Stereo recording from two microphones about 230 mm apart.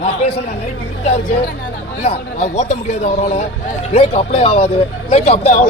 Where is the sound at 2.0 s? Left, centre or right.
Left.